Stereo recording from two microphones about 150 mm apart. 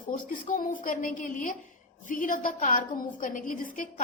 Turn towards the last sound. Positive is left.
turn(degrees=65)  # may be behind; listen again after turning